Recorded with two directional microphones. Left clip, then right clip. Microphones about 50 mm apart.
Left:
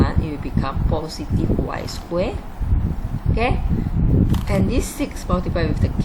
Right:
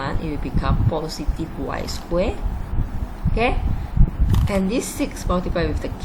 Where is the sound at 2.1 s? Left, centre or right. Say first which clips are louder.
Right 1 dB; centre.